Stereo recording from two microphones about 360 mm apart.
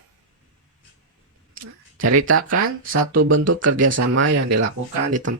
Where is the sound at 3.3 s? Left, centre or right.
Right.